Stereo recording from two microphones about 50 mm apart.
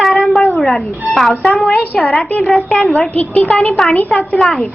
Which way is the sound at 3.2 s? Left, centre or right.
Left.